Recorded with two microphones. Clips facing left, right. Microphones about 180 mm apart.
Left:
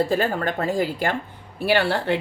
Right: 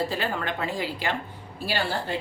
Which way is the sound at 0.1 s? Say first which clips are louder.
Left 6 dB; 45° left (ahead or behind).